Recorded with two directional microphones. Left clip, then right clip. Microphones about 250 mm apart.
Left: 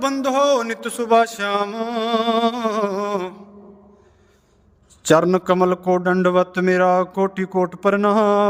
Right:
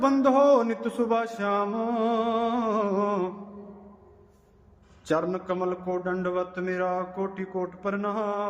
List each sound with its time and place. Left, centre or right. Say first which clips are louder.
0.0 s a man's voice: left 2 dB; left
5.0 s a man's voice: left 12 dB; left